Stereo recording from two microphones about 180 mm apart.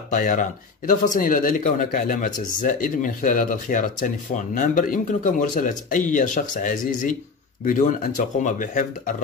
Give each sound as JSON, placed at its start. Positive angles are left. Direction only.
{"t": 0.1, "sound": "speech", "side_deg": 45}